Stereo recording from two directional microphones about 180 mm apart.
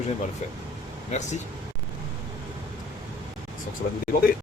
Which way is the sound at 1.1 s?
40° left (ahead or behind).